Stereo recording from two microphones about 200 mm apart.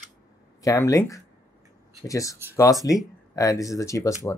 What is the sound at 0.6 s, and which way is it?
Speech, 15° left (ahead or behind).